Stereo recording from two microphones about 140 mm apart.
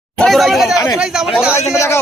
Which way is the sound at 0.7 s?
25° left (ahead or behind).